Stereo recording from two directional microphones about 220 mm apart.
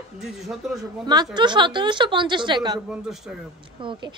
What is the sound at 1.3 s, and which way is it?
A woman's voice, 20° right (ahead or behind).